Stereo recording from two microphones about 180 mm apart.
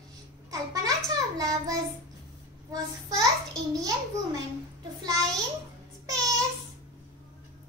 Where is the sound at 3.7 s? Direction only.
20° right (ahead or behind).